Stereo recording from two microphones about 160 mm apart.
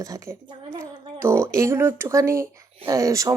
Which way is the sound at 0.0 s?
20° right (ahead or behind).